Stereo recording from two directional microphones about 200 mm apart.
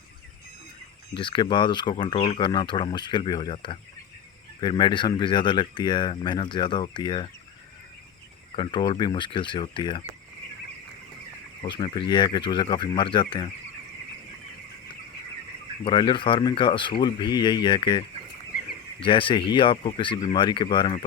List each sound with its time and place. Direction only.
1.1 s speech: 25° left (ahead or behind)
8.5 s speech: 25° left (ahead or behind)
11.6 s speech: 25° left (ahead or behind)
15.8 s speech: 25° left (ahead or behind)
19.0 s speech: 25° left (ahead or behind)